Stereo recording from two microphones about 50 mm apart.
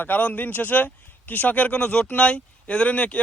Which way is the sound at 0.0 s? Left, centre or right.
Left.